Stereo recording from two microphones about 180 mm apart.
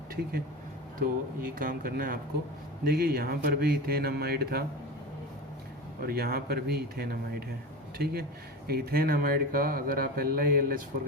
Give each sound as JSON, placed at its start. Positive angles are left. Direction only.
{"t": 0.9, "sound": "speech", "side_deg": -50}
{"t": 6.0, "sound": "speech", "side_deg": -55}